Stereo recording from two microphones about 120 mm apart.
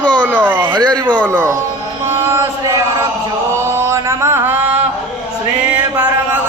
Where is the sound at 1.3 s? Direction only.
25° right (ahead or behind).